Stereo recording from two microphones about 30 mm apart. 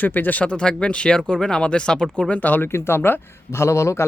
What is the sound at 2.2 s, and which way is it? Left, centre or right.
Speech, left.